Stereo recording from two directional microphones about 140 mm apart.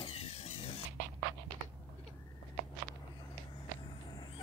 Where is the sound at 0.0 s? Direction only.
45° left (ahead or behind).